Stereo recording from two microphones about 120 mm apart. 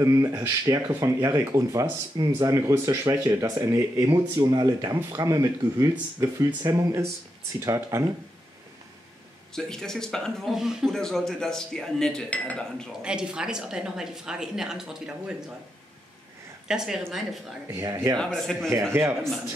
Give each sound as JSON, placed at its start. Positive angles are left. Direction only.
{"t": 0.0, "sound": "speech", "side_deg": -25}
{"t": 9.6, "sound": "speech", "side_deg": 5}
{"t": 13.0, "sound": "speech", "side_deg": -5}
{"t": 16.6, "sound": "speech", "side_deg": -5}
{"t": 17.8, "sound": "speech", "side_deg": -25}
{"t": 18.2, "sound": "speech", "side_deg": 5}
{"t": 18.9, "sound": "speech", "side_deg": -20}